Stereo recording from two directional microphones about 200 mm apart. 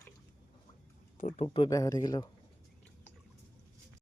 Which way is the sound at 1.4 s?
25° left (ahead or behind).